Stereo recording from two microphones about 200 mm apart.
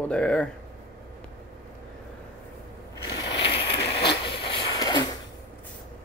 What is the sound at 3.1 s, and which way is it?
Ratchet, 20° left (ahead or behind).